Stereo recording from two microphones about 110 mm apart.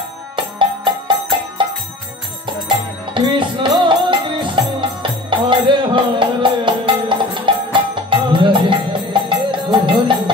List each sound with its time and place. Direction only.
0.4 s music: 45° right (ahead or behind)
3.2 s music: 45° right (ahead or behind)